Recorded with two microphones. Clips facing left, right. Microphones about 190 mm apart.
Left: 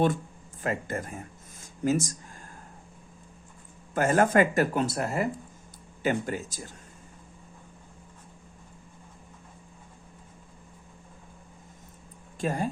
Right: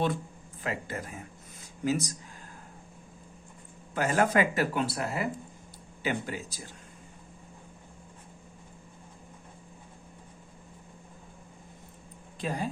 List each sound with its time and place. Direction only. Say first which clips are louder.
0.6 s speech: left 4 dB; 50° left (ahead or behind)
1.6 s a sound: left 3 dB; 45° left (ahead or behind)
3.9 s speech: left 4 dB; 50° left (ahead or behind)
12.4 s speech: left 4 dB; 45° left (ahead or behind)